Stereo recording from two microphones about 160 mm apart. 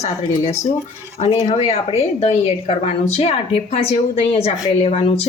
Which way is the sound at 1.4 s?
40° left (ahead or behind).